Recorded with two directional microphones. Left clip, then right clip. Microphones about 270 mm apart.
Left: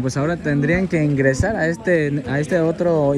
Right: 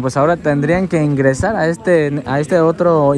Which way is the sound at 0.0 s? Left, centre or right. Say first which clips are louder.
Right 8 dB; centre.